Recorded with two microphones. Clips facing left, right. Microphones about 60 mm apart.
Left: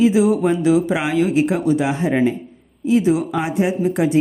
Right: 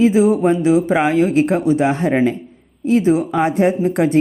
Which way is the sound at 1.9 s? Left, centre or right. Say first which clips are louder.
Right 2 dB; right.